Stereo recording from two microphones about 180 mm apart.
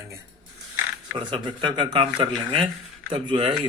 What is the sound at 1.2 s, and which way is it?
A man's voice, 25° right (ahead or behind).